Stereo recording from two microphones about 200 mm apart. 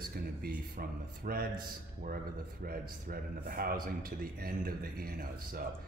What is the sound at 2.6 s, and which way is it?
A man's voice, 45° right (ahead or behind).